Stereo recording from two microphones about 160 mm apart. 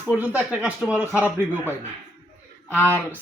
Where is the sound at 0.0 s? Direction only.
10° right (ahead or behind).